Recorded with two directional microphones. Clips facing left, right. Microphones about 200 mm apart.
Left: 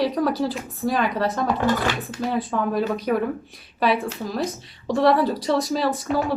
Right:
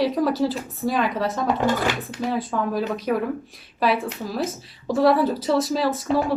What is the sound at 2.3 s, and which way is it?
Speech, centre (ahead or behind).